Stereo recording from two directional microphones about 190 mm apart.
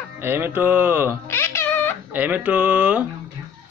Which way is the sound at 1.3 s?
15° left (ahead or behind).